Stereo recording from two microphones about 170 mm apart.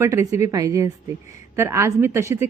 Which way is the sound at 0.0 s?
15° right (ahead or behind).